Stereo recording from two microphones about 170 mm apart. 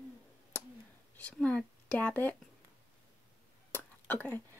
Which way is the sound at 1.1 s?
5° left (ahead or behind).